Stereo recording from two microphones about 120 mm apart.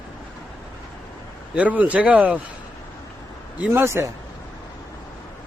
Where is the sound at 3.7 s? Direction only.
20° right (ahead or behind).